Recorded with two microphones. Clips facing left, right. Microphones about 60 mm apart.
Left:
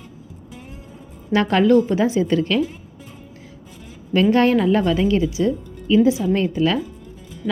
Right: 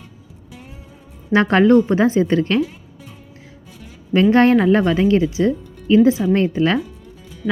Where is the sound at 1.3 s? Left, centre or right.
Right.